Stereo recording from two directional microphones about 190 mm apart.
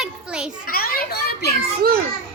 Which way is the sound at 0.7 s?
50° left (ahead or behind).